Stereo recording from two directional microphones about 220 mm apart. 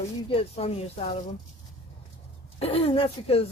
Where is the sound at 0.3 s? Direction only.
25° left (ahead or behind).